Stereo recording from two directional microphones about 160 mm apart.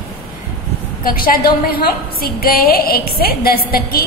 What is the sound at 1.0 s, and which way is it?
A woman's voice, 65° left (ahead or behind).